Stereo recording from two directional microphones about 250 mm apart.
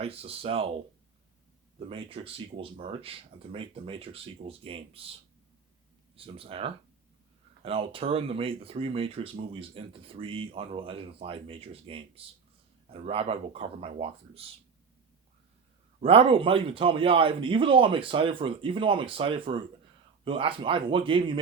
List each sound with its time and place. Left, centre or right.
0.0 s speech: right
1.9 s speech: right
6.1 s speech: right
16.0 s speech: right